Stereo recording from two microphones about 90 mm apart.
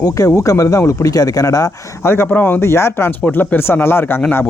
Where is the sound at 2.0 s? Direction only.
30° left (ahead or behind).